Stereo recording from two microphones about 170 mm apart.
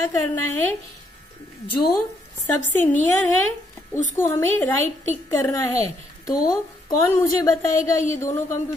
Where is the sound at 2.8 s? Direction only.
45° left (ahead or behind).